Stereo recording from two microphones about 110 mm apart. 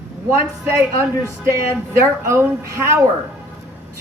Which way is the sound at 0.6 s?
25° right (ahead or behind).